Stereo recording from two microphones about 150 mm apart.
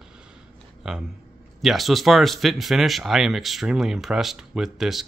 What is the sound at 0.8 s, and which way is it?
Speech, 5° right (ahead or behind).